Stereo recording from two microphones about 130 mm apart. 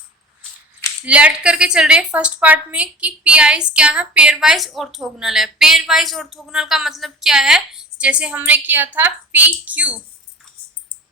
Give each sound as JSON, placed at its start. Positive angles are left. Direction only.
{"t": 1.0, "sound": "a woman's voice", "side_deg": -10}